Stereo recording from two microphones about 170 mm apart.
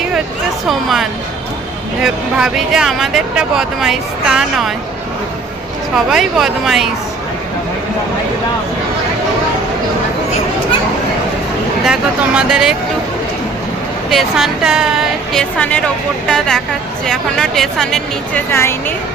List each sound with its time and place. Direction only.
0.7 s speech: centre (ahead or behind)
6.1 s speech: centre (ahead or behind)
11.9 s speech: 5° right (ahead or behind)
14.1 s speech: centre (ahead or behind)
18.5 s speech: 15° left (ahead or behind)